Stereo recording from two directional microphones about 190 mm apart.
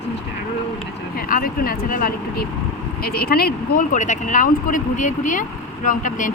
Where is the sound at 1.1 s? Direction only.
50° left (ahead or behind).